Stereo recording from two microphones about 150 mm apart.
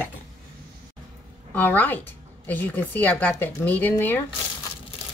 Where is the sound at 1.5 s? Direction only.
10° left (ahead or behind).